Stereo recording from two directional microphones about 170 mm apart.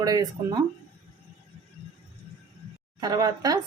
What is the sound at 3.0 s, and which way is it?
Speech, 25° right (ahead or behind).